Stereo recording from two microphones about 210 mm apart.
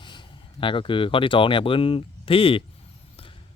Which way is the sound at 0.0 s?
20° left (ahead or behind).